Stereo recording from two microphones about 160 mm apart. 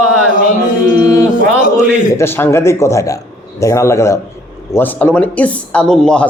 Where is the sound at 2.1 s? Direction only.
15° left (ahead or behind).